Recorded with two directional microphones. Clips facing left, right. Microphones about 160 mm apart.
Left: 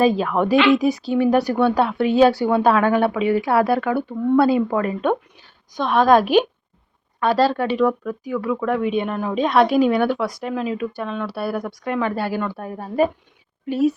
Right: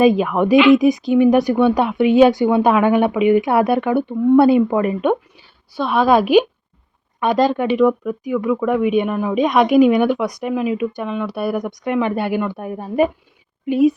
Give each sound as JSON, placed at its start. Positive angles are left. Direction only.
{"t": 0.0, "sound": "speech", "side_deg": -15}